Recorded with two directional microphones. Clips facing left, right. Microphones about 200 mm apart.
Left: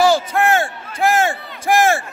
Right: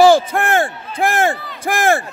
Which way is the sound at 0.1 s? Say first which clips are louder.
Right 2 dB; 55° right (ahead or behind).